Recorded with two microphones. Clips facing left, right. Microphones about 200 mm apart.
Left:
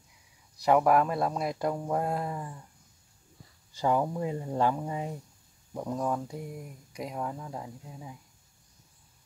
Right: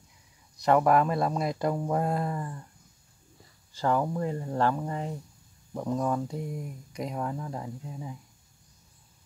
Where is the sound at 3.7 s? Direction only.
15° left (ahead or behind).